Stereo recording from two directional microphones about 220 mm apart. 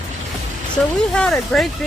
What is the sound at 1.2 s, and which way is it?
Speech, centre (ahead or behind).